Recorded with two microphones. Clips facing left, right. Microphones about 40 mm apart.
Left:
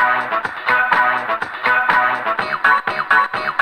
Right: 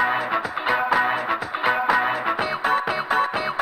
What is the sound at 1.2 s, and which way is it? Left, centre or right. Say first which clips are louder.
Music: left 4 dB; left.